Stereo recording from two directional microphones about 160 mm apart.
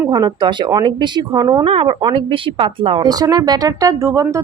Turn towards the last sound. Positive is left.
turn(degrees=-20)  # may be behind; listen again after turning